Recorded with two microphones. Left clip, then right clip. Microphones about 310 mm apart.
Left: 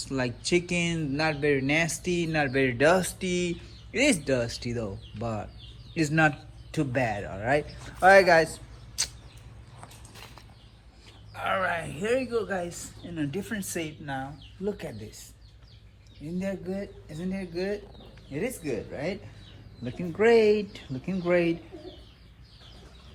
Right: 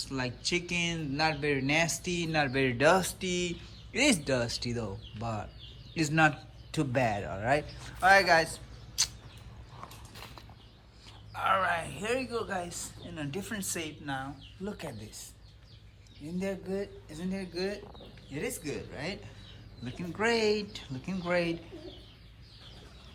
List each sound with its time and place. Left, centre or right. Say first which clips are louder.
0.0 s speech: left 4 dB; centre
11.3 s speech: even; centre
16.4 s speech: left 1 dB; centre